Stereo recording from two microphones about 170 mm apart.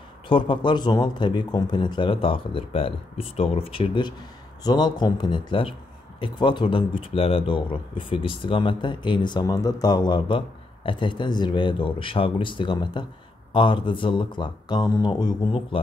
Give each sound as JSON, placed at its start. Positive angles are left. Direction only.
{"t": 0.3, "sound": "a man's voice", "side_deg": 30}